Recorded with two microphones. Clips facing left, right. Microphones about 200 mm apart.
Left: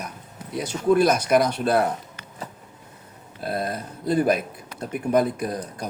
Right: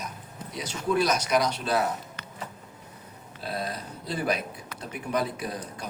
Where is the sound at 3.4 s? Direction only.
50° left (ahead or behind).